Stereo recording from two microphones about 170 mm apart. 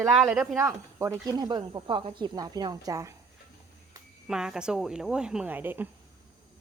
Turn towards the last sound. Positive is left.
turn(degrees=-10)  # may be behind; listen again after turning